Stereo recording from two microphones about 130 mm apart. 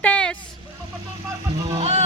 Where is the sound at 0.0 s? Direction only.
10° left (ahead or behind).